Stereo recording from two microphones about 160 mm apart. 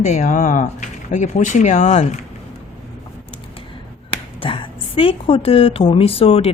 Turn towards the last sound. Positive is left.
turn(degrees=40)  # may be behind; listen again after turning